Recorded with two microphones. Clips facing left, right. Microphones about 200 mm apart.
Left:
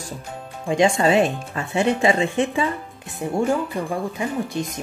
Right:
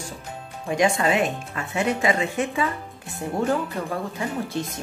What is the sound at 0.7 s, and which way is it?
Speech, 25° left (ahead or behind).